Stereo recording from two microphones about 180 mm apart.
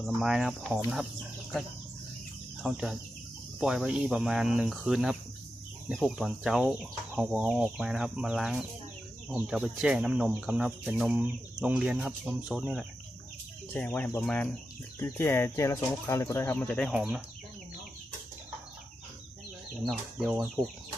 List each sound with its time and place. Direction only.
0.0 s speech: centre (ahead or behind)
2.6 s speech: centre (ahead or behind)
13.7 s speech: 10° left (ahead or behind)
16.9 s speech: 5° right (ahead or behind)
19.8 s speech: centre (ahead or behind)
20.6 s speech: 20° right (ahead or behind)